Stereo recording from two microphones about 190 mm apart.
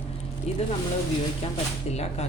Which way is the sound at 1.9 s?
35° left (ahead or behind).